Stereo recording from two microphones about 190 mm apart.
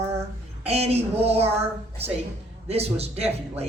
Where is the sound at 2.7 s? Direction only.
35° right (ahead or behind).